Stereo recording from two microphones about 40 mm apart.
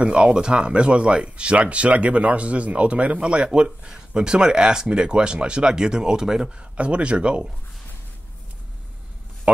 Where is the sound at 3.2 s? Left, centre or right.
Right.